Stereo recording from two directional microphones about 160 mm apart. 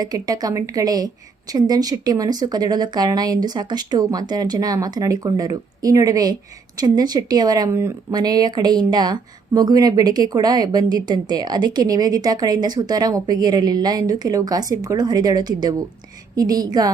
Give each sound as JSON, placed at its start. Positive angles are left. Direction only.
{"t": 0.0, "sound": "speech", "side_deg": -25}